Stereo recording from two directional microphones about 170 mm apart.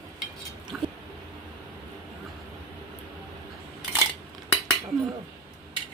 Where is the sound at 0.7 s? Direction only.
5° right (ahead or behind).